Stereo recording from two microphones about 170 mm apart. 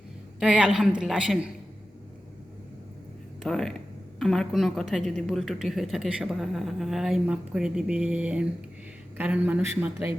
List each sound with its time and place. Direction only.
0.3 s a woman's voice: 5° right (ahead or behind)
3.4 s a woman's voice: 5° left (ahead or behind); by 10.1 s 15° right (ahead or behind)